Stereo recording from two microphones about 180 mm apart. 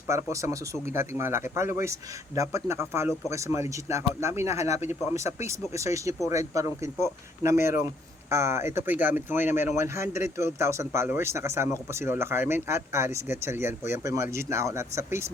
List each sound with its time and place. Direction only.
0.1 s speech: 15° right (ahead or behind)